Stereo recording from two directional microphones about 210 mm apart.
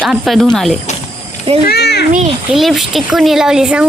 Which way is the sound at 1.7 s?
50° left (ahead or behind).